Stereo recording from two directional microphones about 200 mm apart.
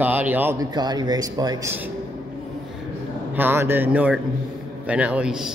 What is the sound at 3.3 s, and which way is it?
Speech, 10° right (ahead or behind).